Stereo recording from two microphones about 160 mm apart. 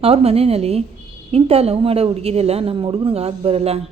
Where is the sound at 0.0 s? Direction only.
40° right (ahead or behind).